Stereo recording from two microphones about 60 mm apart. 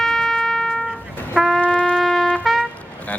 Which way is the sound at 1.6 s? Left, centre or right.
Left.